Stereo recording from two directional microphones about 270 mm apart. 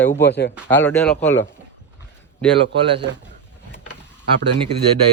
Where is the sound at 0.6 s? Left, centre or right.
Centre.